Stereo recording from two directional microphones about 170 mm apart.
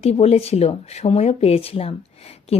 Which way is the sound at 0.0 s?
40° left (ahead or behind).